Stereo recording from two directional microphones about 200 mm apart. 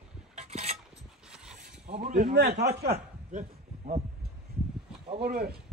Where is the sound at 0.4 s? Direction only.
35° right (ahead or behind).